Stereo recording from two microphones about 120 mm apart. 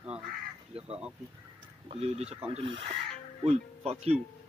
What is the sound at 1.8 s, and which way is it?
Speech, 60° right (ahead or behind).